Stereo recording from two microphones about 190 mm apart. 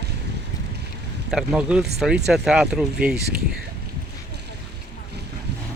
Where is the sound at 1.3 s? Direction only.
5° right (ahead or behind).